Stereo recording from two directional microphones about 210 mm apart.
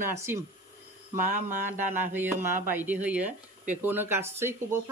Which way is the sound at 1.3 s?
35° right (ahead or behind).